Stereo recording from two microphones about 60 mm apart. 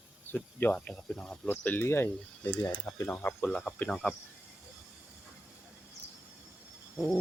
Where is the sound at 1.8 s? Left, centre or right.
Left.